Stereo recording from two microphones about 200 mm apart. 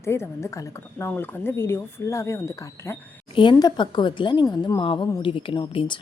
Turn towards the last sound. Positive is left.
turn(degrees=25)  # may be behind; listen again after turning